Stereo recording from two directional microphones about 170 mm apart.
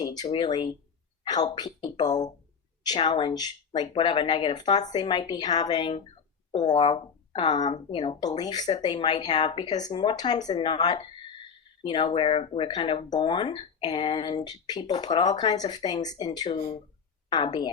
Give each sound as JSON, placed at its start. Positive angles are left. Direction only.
{"t": 0.0, "sound": "a woman's voice", "side_deg": 25}